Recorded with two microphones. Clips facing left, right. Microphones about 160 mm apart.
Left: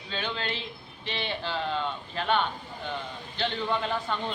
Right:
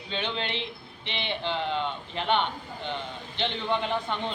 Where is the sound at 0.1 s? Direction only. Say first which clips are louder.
Right 1 dB; 20° right (ahead or behind).